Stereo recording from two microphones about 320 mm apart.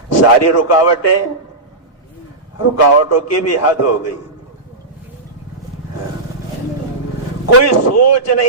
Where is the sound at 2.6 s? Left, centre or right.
Left.